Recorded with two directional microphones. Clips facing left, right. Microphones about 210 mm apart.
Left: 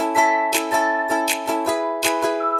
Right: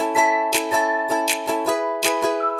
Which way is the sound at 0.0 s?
Centre (ahead or behind).